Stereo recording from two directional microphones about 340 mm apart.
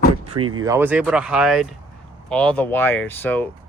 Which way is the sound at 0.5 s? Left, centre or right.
Centre.